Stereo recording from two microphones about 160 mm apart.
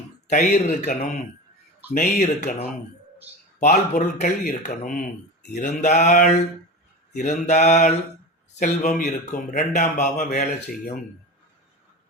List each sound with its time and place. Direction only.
0.3 s speech: 50° left (ahead or behind)